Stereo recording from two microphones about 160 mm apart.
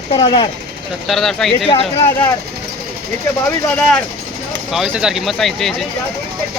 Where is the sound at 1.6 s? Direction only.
35° left (ahead or behind).